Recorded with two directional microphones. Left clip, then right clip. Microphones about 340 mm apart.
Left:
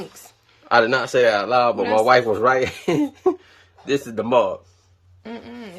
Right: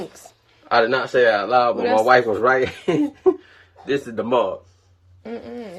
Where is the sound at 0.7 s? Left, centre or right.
Left.